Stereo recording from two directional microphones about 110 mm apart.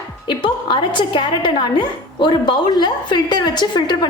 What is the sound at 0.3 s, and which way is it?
A woman's voice, 45° left (ahead or behind).